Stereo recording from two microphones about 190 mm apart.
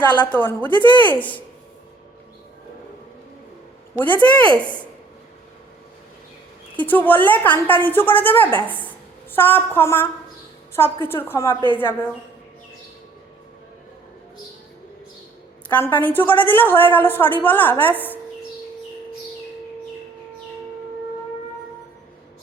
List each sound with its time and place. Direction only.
0.3 s a woman's voice: 10° left (ahead or behind)
3.9 s a woman's voice: 10° left (ahead or behind)
6.7 s a woman's voice: 10° left (ahead or behind)
15.7 s a woman's voice: 10° left (ahead or behind)